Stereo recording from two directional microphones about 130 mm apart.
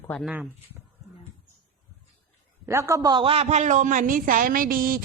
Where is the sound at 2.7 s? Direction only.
25° right (ahead or behind); by 3.4 s 40° right (ahead or behind).